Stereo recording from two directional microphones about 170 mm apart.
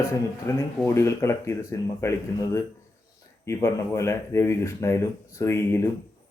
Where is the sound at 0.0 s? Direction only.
15° left (ahead or behind).